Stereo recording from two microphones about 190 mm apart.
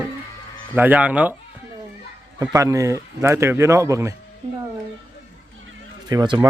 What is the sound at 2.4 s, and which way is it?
Speech, 15° right (ahead or behind).